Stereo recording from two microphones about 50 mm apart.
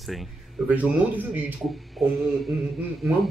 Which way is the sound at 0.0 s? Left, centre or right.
Centre.